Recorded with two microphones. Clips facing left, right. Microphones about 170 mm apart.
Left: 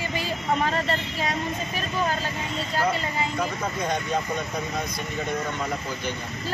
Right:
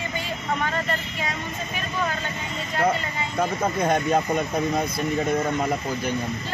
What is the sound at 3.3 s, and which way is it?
Speech, 50° right (ahead or behind).